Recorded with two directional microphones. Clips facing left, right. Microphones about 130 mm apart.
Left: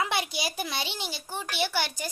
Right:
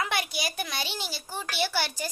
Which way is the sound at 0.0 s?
25° left (ahead or behind).